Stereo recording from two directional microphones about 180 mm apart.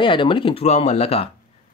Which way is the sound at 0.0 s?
25° left (ahead or behind).